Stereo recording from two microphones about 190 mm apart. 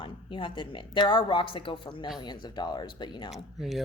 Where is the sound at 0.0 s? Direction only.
25° left (ahead or behind).